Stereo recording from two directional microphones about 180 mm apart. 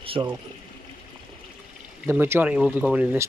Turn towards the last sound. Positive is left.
turn(degrees=-10)  # may be behind; listen again after turning